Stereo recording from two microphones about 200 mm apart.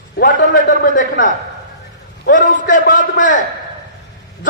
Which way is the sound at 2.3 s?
40° left (ahead or behind).